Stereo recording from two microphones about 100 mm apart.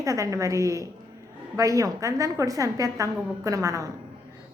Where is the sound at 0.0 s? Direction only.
30° right (ahead or behind).